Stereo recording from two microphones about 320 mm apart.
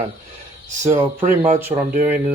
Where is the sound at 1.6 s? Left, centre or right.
Centre.